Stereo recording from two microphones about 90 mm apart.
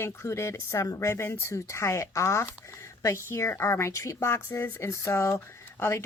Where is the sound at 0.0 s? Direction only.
30° left (ahead or behind).